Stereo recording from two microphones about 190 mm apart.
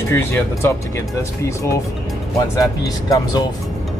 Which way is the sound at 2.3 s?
20° left (ahead or behind).